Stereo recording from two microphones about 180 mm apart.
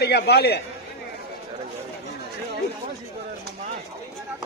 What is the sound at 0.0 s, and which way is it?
Speech, 65° left (ahead or behind).